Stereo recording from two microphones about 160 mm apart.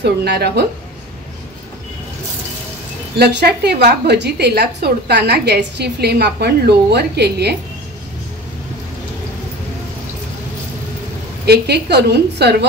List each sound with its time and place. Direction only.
0.2 s a woman's voice: 90° right
3.2 s a woman's voice: 85° right
11.4 s a woman's voice: 90° right